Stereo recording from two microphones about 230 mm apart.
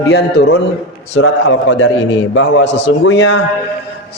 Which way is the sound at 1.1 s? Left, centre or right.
Left.